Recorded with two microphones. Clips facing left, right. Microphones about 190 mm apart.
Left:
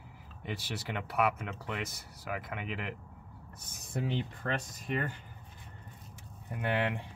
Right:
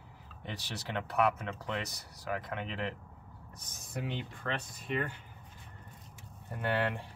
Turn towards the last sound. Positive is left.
turn(degrees=20)  # may be behind; listen again after turning